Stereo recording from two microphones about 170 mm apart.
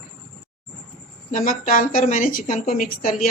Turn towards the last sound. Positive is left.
turn(degrees=55)  # may be behind; listen again after turning